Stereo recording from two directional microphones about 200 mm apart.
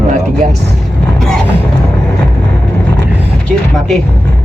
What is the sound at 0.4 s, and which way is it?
Speech, 45° right (ahead or behind).